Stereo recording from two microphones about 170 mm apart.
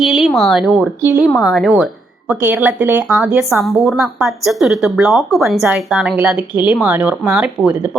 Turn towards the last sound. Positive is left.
turn(degrees=-5)  # may be behind; listen again after turning